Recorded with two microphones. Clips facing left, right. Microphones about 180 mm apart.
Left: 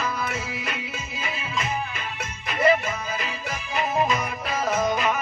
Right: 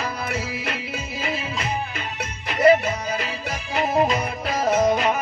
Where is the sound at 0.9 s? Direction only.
65° right (ahead or behind).